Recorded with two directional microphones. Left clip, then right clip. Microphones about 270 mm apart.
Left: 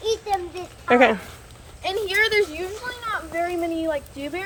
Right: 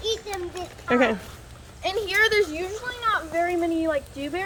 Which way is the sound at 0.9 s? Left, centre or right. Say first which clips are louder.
Left 5 dB; centre.